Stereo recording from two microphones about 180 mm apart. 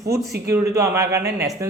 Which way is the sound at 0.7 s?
15° right (ahead or behind).